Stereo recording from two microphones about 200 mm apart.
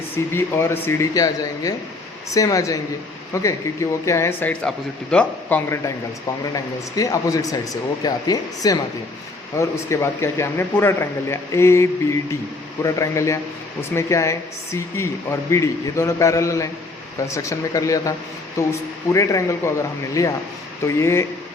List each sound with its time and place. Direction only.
0.3 s speech: 10° left (ahead or behind)